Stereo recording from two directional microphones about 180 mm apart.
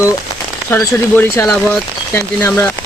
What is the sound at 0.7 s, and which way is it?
Speech, 15° left (ahead or behind).